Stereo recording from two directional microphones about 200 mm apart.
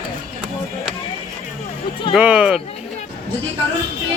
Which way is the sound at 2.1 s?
5° right (ahead or behind).